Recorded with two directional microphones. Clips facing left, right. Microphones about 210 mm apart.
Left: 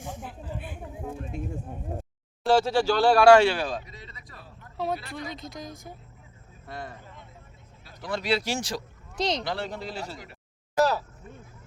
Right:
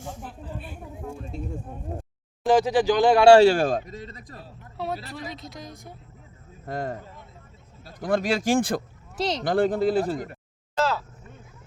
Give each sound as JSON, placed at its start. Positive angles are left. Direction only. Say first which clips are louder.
{"t": 0.0, "sound": "a sound", "louder": "right 1 dB", "side_deg": 15}
{"t": 2.4, "sound": "speech", "louder": "right 2 dB", "side_deg": -15}
{"t": 4.8, "sound": "speech", "louder": "left 1 dB", "side_deg": 0}
{"t": 6.7, "sound": "speech", "louder": "right 9 dB", "side_deg": -45}
{"t": 9.1, "sound": "speech", "louder": "right 1 dB", "side_deg": -5}
{"t": 9.4, "sound": "speech", "louder": "right 11 dB", "side_deg": -50}